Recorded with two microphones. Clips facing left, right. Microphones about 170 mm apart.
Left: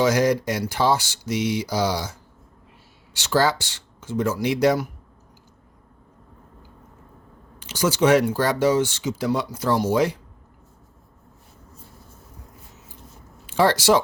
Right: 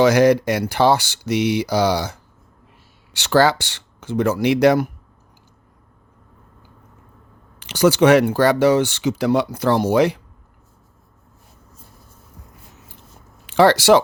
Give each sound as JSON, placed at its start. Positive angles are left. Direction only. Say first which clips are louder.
{"t": 0.0, "sound": "speech", "louder": "right 6 dB", "side_deg": -70}
{"t": 7.6, "sound": "speech", "louder": "right 6 dB", "side_deg": -70}
{"t": 13.5, "sound": "speech", "louder": "right 5 dB", "side_deg": -75}